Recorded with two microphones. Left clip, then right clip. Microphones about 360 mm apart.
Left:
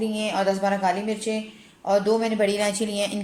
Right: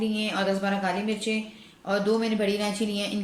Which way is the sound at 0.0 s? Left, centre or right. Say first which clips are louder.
Left 3 dB; centre.